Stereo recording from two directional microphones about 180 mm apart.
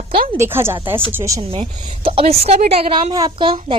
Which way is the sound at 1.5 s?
30° right (ahead or behind).